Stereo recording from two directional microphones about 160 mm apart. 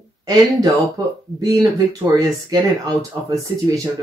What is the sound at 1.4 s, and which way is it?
Speech, 20° right (ahead or behind).